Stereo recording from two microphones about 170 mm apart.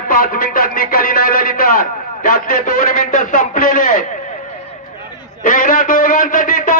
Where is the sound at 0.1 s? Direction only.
55° left (ahead or behind).